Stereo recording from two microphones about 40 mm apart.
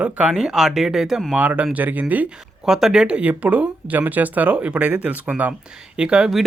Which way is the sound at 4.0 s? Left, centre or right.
Right.